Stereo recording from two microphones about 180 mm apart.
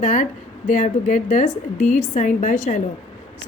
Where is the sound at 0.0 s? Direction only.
40° left (ahead or behind).